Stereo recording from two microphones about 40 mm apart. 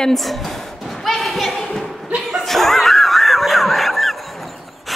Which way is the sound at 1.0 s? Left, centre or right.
Centre.